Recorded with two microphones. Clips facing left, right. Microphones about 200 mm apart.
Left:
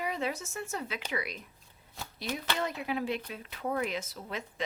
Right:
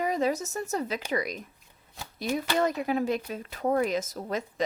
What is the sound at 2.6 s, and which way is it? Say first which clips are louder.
Speech: right 9 dB; 45° right (ahead or behind).